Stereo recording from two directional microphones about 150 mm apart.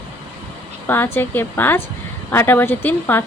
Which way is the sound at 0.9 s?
15° left (ahead or behind).